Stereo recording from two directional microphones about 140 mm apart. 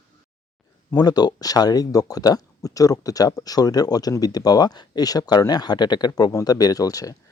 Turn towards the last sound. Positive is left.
turn(degrees=25)  # may be behind; listen again after turning